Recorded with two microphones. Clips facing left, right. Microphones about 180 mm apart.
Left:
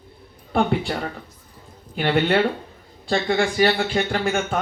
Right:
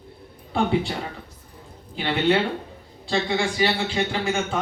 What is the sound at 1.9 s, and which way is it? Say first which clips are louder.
A man's voice: left 2 dB; 55° left (ahead or behind).